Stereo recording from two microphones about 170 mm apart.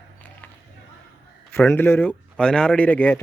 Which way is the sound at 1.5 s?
10° left (ahead or behind).